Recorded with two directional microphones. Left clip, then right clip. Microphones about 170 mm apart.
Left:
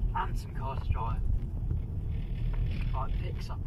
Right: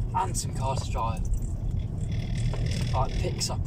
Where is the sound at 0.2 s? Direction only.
25° right (ahead or behind).